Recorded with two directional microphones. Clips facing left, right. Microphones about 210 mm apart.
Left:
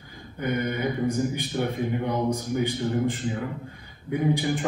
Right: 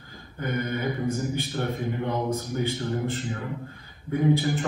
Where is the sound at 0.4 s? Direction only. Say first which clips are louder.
Left 2 dB; 15° left (ahead or behind).